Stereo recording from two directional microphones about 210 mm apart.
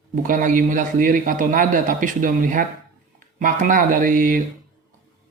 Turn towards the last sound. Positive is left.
turn(degrees=-40)  # may be behind; listen again after turning